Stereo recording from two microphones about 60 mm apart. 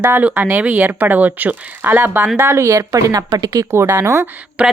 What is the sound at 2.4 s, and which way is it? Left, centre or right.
Speech, right.